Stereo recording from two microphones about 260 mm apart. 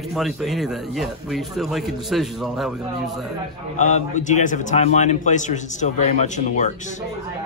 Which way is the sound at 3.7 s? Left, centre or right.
Left.